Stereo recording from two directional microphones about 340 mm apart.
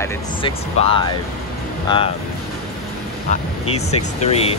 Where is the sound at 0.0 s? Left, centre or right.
Centre.